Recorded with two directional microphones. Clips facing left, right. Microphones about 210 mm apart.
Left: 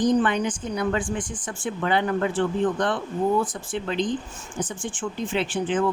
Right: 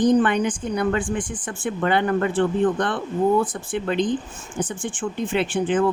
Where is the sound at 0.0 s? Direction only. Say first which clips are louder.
Right 3 dB; 55° right (ahead or behind).